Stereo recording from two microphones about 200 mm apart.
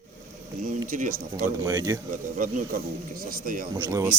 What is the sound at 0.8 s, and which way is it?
Speech, 40° right (ahead or behind).